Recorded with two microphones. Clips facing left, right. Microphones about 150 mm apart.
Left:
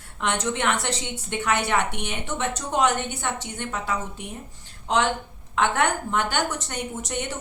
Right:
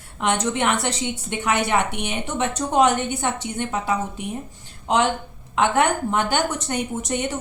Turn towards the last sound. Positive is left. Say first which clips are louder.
# right 5 dB
turn(degrees=-15)  # may be behind; listen again after turning